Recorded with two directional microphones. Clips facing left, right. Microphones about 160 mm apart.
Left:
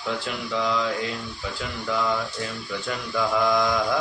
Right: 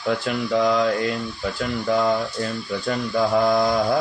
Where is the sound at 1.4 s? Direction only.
45° right (ahead or behind).